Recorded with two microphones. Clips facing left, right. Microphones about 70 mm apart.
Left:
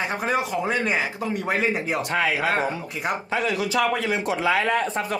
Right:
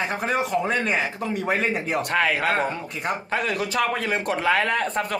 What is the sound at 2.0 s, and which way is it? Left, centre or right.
A man's voice, right.